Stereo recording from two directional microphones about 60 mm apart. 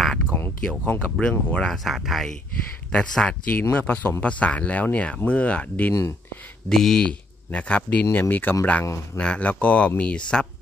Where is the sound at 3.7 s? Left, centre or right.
Left.